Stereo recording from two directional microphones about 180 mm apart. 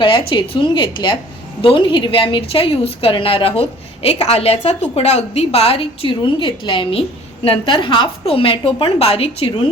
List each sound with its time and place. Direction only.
0.0 s a woman's voice: 30° left (ahead or behind)